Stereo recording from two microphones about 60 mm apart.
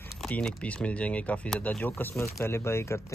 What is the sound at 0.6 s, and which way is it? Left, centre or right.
Speech, left.